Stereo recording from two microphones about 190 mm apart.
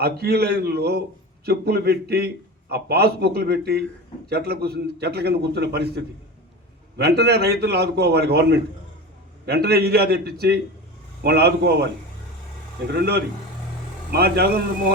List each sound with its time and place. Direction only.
0.0 s a man's voice: 55° right (ahead or behind)
12.9 s a man's voice: 55° right (ahead or behind)